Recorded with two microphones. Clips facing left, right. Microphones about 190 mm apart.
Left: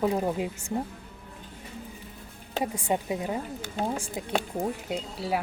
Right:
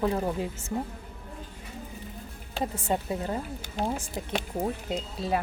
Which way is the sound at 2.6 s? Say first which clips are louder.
Left 1 dB; 15° left (ahead or behind).